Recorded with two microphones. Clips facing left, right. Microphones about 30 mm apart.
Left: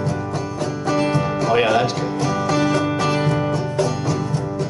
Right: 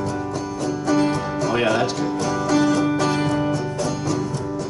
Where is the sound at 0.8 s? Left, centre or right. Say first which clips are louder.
Left 1 dB; centre.